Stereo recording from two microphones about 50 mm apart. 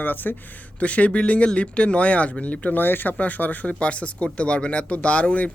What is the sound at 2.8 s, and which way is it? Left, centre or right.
Speech, left.